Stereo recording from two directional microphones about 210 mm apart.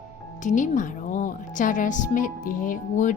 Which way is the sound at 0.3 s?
35° left (ahead or behind).